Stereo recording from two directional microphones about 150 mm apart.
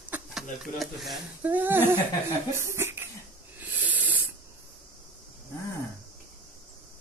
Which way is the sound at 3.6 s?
10° right (ahead or behind).